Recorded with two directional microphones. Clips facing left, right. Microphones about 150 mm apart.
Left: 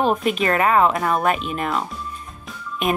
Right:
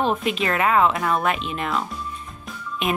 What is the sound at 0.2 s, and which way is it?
Speech, 45° left (ahead or behind).